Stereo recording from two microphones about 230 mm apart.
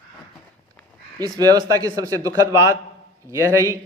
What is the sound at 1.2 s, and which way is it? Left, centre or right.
A man's voice, centre.